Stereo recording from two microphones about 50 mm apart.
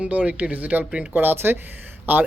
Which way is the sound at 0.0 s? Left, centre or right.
Right.